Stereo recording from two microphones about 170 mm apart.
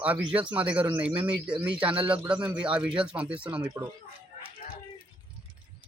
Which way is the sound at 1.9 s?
30° right (ahead or behind).